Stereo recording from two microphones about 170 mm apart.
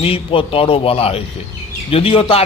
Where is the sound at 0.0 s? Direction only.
35° left (ahead or behind).